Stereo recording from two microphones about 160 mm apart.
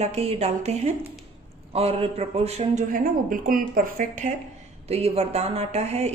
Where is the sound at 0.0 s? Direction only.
40° right (ahead or behind).